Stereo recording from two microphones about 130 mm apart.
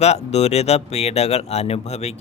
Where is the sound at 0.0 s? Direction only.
55° left (ahead or behind).